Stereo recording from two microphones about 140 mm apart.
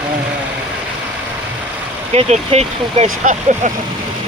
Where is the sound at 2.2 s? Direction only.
50° right (ahead or behind).